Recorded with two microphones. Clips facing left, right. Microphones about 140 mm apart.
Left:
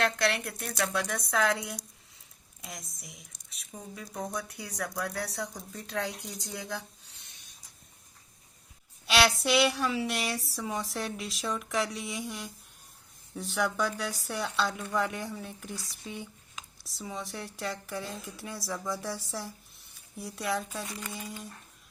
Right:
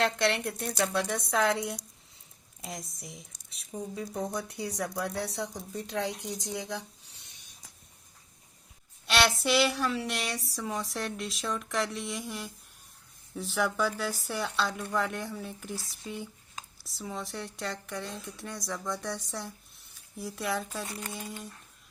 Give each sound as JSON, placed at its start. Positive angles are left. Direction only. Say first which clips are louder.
{"t": 0.0, "sound": "speech", "louder": "right 1 dB", "side_deg": -25}
{"t": 9.0, "sound": "a sound", "louder": "left 1 dB", "side_deg": 0}
{"t": 9.4, "sound": "speech", "louder": "even", "side_deg": 0}